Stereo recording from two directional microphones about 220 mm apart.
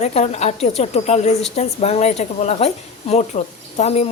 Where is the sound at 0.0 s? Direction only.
30° left (ahead or behind).